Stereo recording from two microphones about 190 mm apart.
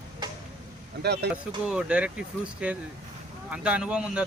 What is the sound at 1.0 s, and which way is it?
Speech, 60° right (ahead or behind).